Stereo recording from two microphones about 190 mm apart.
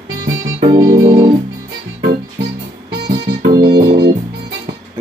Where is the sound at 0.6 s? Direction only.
30° right (ahead or behind).